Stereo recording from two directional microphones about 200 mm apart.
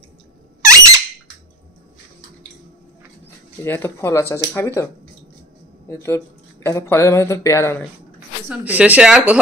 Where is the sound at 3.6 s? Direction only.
10° left (ahead or behind).